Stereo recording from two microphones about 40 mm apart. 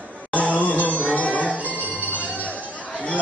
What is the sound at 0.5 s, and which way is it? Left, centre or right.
Music, left.